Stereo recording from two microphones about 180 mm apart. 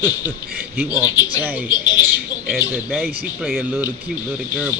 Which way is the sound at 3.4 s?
Centre (ahead or behind).